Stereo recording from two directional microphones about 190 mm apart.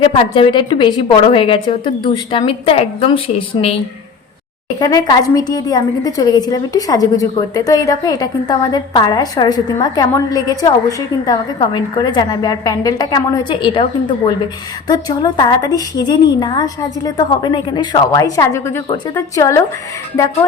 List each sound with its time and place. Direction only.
0.0 s a woman's voice: 25° left (ahead or behind)
4.8 s a woman's voice: 20° left (ahead or behind)